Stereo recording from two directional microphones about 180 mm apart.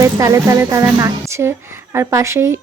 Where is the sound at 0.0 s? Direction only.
15° right (ahead or behind).